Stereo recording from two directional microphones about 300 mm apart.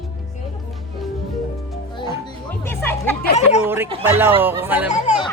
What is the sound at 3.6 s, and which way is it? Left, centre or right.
Speech, centre.